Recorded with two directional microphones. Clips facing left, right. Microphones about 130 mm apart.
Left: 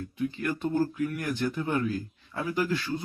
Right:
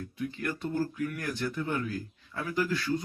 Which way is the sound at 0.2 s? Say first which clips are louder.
Left 4 dB; 25° left (ahead or behind).